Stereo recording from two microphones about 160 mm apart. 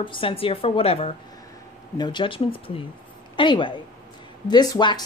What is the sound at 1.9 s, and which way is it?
Speech, 30° left (ahead or behind).